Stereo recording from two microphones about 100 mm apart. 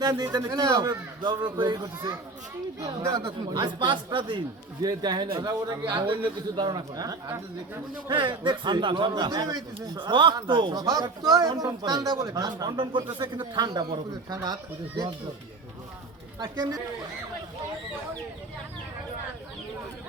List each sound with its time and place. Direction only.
0.0 s a man's voice: 40° right (ahead or behind)
5.8 s speech: 55° right (ahead or behind)
6.6 s a man's voice: 45° right (ahead or behind)
8.1 s a man's voice: 55° right (ahead or behind)
10.0 s a man's voice: 55° right (ahead or behind)
10.8 s a man's voice: 40° right (ahead or behind)
16.4 s a man's voice: 40° right (ahead or behind)